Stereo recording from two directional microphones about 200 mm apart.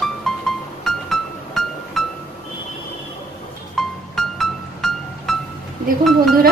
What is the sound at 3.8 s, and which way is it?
Music, centre (ahead or behind).